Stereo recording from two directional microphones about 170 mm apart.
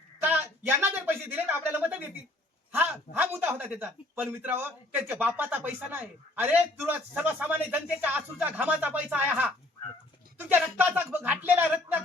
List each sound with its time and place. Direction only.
0.2 s speech: 10° right (ahead or behind)